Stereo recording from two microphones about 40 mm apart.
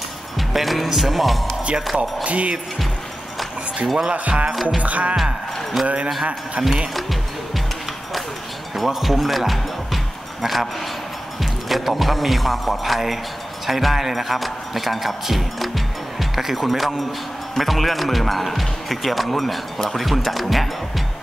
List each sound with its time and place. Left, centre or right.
0.5 s speech: centre
2.2 s speech: right
3.8 s speech: centre
4.1 s speech: right
5.1 s speech: centre
7.0 s speech: centre
8.7 s speech: centre
11.7 s speech: centre